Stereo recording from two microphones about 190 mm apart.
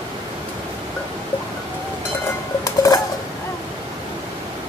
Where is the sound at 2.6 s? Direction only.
20° left (ahead or behind).